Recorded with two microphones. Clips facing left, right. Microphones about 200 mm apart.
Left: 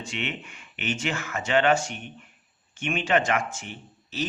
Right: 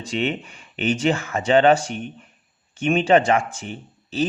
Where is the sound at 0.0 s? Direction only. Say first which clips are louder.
Right 9 dB; 35° right (ahead or behind).